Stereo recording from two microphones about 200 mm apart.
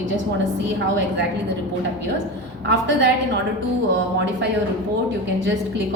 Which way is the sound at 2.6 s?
60° right (ahead or behind).